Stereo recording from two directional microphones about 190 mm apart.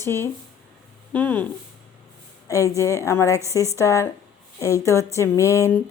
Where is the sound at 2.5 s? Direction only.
15° left (ahead or behind).